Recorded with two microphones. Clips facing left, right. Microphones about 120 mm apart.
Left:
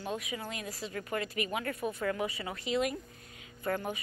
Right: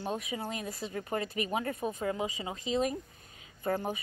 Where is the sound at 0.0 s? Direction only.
30° right (ahead or behind).